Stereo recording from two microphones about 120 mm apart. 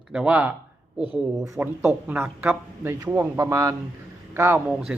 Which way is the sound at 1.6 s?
15° right (ahead or behind).